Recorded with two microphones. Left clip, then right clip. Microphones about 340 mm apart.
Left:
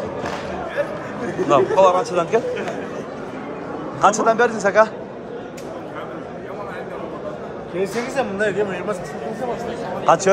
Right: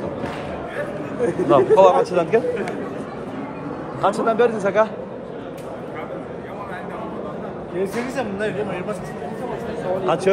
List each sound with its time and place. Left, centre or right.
1.5 s a man's voice: centre
4.0 s a man's voice: centre
8.2 s speech: left
10.0 s a man's voice: centre